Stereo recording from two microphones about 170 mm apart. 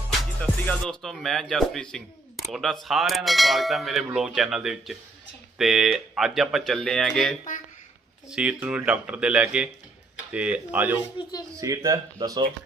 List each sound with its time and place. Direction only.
0.2 s speech: 5° left (ahead or behind)
2.5 s a sound: centre (ahead or behind)
8.3 s speech: 5° right (ahead or behind)
11.2 s a man's voice: 30° left (ahead or behind)
11.6 s speech: 20° right (ahead or behind)